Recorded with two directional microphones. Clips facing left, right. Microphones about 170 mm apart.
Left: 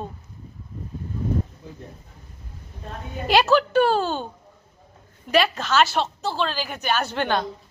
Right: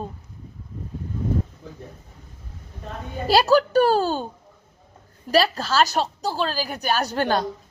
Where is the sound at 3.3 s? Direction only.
35° right (ahead or behind).